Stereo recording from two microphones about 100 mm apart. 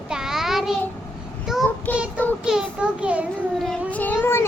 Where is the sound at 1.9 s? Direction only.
15° left (ahead or behind).